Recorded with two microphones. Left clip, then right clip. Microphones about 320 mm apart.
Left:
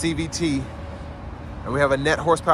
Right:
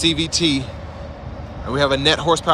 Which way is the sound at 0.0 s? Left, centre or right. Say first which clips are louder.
Right 7 dB; centre.